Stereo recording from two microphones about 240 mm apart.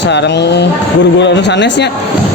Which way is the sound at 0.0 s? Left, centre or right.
Left.